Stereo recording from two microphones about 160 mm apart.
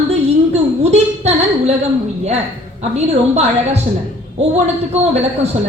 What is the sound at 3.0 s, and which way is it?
Speech, 45° right (ahead or behind).